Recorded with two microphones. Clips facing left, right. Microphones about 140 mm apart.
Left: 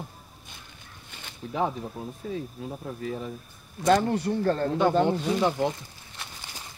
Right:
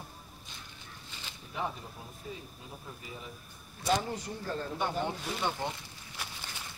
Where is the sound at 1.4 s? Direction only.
90° left.